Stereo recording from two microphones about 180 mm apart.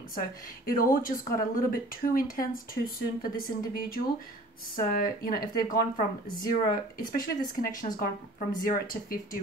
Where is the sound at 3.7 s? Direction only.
55° left (ahead or behind).